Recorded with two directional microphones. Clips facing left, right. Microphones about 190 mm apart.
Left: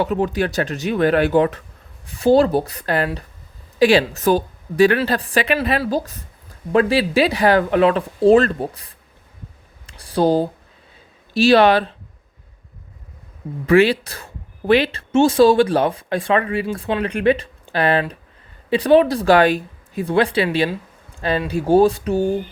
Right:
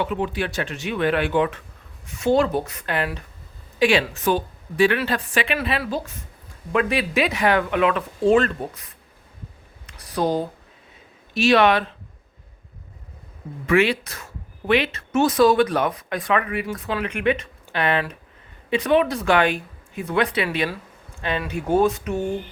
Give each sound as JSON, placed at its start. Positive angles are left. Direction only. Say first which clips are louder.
{"t": 0.0, "sound": "speech", "louder": "left 5 dB", "side_deg": 40}
{"t": 13.7, "sound": "speech", "louder": "left 5 dB", "side_deg": 35}